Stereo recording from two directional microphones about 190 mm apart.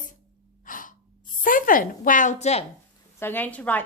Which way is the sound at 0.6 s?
45° left (ahead or behind).